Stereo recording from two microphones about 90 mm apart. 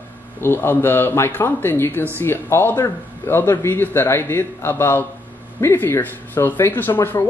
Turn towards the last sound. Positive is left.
turn(degrees=25)  # may be behind; listen again after turning